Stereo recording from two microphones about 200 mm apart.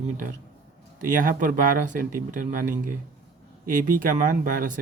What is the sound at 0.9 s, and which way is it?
Speech, 40° right (ahead or behind).